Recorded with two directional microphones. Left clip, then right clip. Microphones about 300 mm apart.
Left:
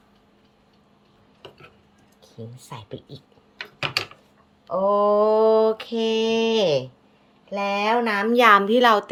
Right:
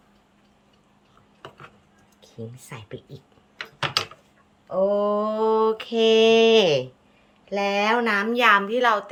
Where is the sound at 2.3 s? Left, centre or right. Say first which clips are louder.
Even; centre.